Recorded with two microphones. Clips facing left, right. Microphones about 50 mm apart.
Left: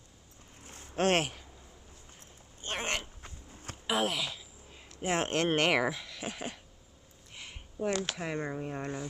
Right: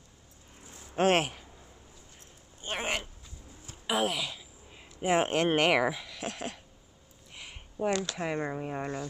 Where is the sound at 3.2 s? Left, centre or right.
Left.